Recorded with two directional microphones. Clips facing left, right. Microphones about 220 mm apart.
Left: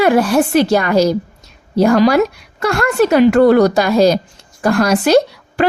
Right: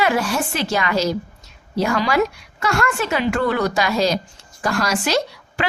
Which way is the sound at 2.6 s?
60° left (ahead or behind).